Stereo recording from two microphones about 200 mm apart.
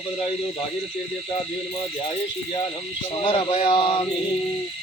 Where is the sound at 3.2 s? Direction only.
25° left (ahead or behind).